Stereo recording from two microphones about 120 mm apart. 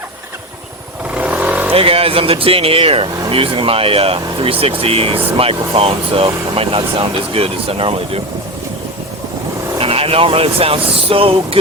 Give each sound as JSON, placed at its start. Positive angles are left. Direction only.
{"t": 1.1, "sound": "vehicle", "side_deg": -10}
{"t": 1.7, "sound": "speech", "side_deg": -50}
{"t": 9.7, "sound": "speech", "side_deg": -50}